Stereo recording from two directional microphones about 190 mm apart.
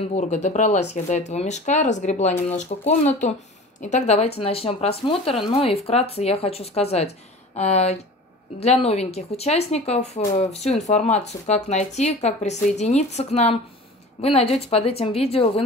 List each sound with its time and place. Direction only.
0.1 s speech: 35° left (ahead or behind)